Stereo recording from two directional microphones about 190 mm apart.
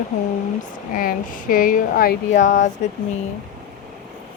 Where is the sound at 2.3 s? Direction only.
40° left (ahead or behind).